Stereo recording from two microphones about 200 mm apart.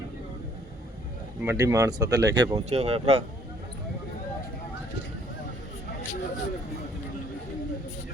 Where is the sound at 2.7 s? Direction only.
30° right (ahead or behind).